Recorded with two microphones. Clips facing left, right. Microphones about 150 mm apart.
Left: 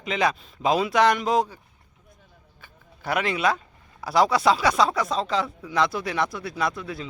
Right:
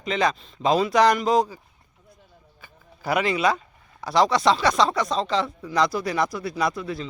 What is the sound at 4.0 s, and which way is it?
Speech, 5° left (ahead or behind).